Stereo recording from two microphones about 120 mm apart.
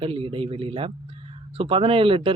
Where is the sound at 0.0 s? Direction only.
50° right (ahead or behind).